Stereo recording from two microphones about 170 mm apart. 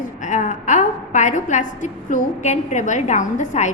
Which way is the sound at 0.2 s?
45° left (ahead or behind).